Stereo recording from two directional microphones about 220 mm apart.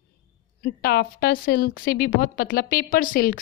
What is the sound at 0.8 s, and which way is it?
A woman's voice, 45° left (ahead or behind).